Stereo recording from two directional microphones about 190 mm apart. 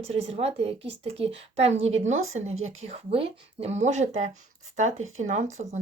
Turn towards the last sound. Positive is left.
turn(degrees=-35)  # may be behind; listen again after turning